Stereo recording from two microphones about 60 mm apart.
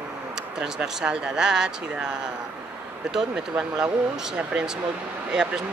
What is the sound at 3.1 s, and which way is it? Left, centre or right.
Speech, centre.